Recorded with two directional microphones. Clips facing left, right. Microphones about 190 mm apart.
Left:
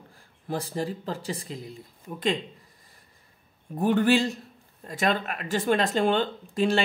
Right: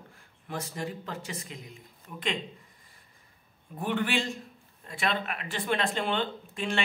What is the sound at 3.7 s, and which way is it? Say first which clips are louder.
Speech: left 8 dB; 40° left (ahead or behind).